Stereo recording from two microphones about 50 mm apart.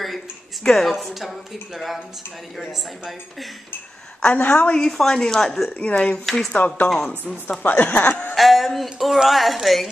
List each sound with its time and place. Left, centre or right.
0.7 s a woman's voice: centre
4.3 s speech: left
4.7 s speech: centre
5.8 s speech: left
6.2 s a woman's voice: centre
6.5 s speech: left
8.4 s a woman's voice: centre